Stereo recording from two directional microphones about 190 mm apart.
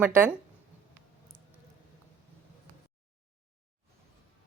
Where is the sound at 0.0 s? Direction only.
10° right (ahead or behind).